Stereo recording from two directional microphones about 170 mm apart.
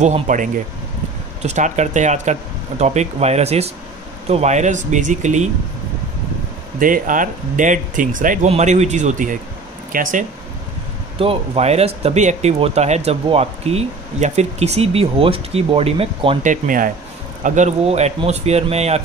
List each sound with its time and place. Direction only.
0.0 s speech: 45° right (ahead or behind)
6.8 s speech: 50° right (ahead or behind)
11.1 s speech: 35° right (ahead or behind)
16.4 s speech: 55° right (ahead or behind)